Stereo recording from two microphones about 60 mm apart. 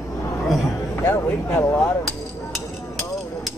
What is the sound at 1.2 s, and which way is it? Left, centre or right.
Speech, left.